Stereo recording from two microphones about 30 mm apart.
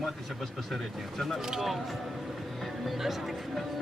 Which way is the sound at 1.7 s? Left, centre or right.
Centre.